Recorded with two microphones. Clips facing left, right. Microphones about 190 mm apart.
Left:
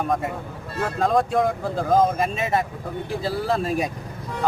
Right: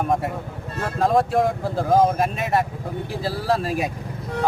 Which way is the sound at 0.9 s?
Centre (ahead or behind).